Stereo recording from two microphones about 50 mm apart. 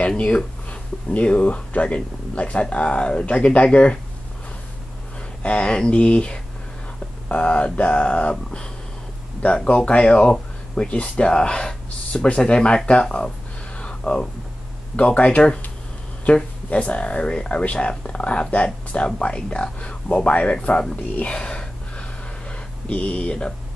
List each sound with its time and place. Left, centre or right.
0.7 s speech: left
5.4 s speech: left
9.7 s speech: left
13.7 s a sound: left
15.0 s speech: left